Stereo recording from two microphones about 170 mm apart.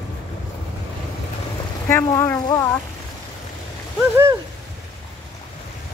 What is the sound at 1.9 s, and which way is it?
Speech, 15° left (ahead or behind).